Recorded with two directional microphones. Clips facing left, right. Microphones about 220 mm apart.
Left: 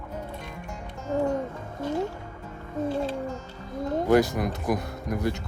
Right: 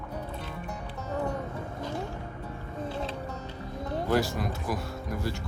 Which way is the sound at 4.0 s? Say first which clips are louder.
Left 6 dB; 20° left (ahead or behind).